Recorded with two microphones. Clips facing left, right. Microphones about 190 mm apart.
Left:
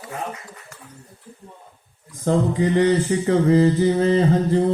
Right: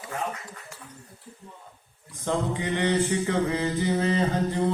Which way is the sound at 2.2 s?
40° left (ahead or behind).